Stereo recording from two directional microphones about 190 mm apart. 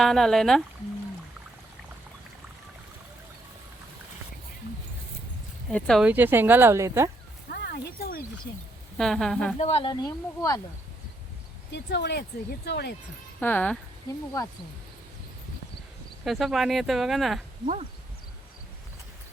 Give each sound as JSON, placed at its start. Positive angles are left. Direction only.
{"t": 0.0, "sound": "speech", "side_deg": 0}
{"t": 5.7, "sound": "speech", "side_deg": 5}
{"t": 7.5, "sound": "speech", "side_deg": 55}
{"t": 9.0, "sound": "speech", "side_deg": 0}
{"t": 9.6, "sound": "speech", "side_deg": 30}
{"t": 11.7, "sound": "speech", "side_deg": 65}
{"t": 13.4, "sound": "speech", "side_deg": 10}
{"t": 14.1, "sound": "speech", "side_deg": 20}
{"t": 16.2, "sound": "speech", "side_deg": 0}